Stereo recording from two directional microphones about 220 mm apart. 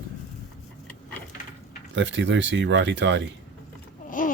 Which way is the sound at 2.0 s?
55° right (ahead or behind).